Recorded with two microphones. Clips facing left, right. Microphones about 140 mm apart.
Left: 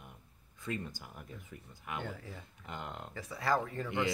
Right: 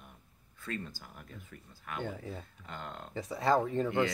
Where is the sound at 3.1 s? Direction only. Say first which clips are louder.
Right 5 dB; 20° right (ahead or behind).